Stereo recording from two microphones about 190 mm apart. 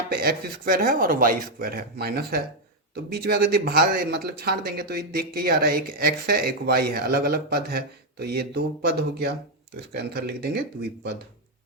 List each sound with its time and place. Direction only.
0.1 s speech: 55° right (ahead or behind)